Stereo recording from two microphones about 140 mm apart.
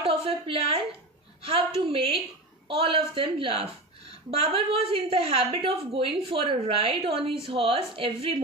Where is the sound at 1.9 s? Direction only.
40° right (ahead or behind).